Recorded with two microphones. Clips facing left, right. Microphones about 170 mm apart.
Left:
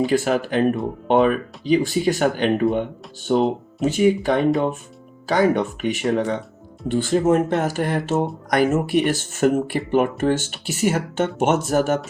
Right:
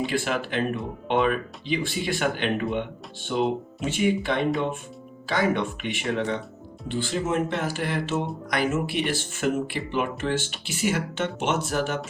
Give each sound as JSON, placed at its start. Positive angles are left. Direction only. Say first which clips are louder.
{"t": 0.0, "sound": "speech", "louder": "left 7 dB", "side_deg": 45}